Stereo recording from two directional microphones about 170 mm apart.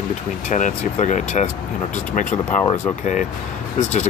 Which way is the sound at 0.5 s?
45° left (ahead or behind).